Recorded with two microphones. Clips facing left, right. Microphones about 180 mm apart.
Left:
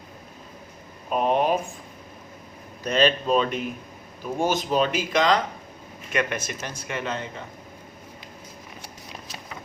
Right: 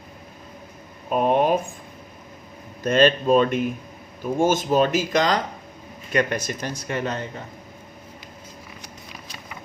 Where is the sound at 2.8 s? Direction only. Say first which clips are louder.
Right 4 dB; 50° right (ahead or behind).